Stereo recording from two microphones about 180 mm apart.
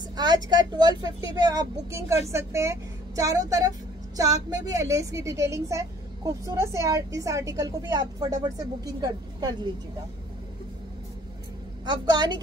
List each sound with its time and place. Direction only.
0.1 s a woman's voice: 25° right (ahead or behind)
11.8 s speech: 25° right (ahead or behind)